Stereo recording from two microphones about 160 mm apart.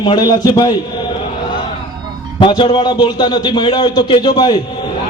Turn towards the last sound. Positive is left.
turn(degrees=30)  # may be behind; listen again after turning